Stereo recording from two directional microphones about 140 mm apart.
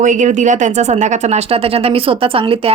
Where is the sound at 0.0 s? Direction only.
65° right (ahead or behind).